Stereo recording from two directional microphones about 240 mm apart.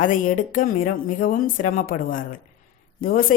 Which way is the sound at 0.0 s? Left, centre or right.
Left.